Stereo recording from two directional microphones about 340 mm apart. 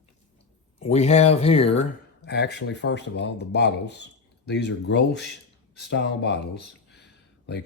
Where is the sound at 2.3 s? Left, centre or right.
Left.